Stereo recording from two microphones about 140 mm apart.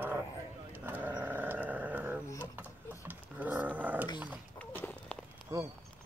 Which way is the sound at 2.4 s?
10° right (ahead or behind).